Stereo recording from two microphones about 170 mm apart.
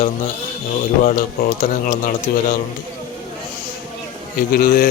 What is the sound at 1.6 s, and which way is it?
Speech, 50° left (ahead or behind).